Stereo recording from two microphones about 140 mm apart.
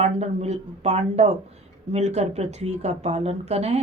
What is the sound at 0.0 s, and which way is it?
A woman's voice, 50° right (ahead or behind).